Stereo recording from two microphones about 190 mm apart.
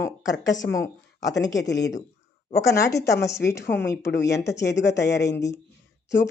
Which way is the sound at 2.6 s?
15° left (ahead or behind).